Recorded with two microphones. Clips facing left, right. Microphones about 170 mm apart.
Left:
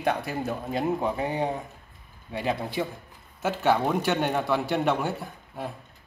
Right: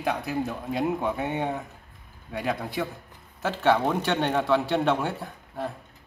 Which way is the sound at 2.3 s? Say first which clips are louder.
Left 1 dB; 25° left (ahead or behind).